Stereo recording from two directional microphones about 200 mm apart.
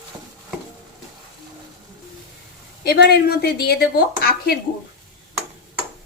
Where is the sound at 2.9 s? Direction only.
55° left (ahead or behind).